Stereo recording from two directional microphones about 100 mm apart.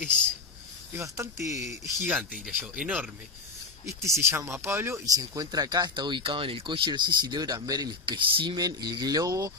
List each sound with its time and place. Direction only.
1.0 s speech: 30° right (ahead or behind)
2.0 s speech: 15° right (ahead or behind)
3.8 s speech: 30° right (ahead or behind)
5.0 s speech: 35° right (ahead or behind)
8.0 s speech: 55° right (ahead or behind); by 9.5 s 35° right (ahead or behind)